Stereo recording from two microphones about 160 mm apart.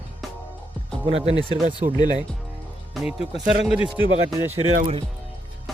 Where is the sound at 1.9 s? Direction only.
25° left (ahead or behind).